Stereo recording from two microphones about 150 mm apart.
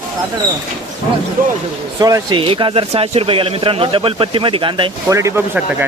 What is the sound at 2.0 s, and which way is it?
A man's voice, 25° right (ahead or behind).